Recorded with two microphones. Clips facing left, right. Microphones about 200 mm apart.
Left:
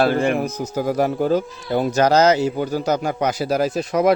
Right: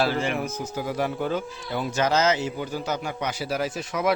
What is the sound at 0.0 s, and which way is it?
Speech, 55° left (ahead or behind).